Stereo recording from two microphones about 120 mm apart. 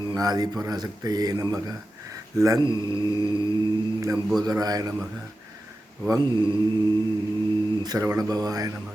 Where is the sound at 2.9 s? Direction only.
40° right (ahead or behind).